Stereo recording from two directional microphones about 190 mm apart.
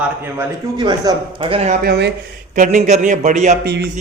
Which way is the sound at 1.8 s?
60° right (ahead or behind).